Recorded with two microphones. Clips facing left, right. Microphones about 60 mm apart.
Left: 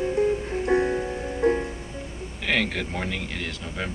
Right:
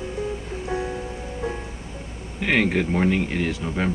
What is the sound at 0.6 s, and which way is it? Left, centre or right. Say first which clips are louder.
Music: left 6 dB; left.